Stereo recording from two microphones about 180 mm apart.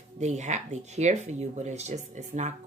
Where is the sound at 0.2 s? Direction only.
40° right (ahead or behind).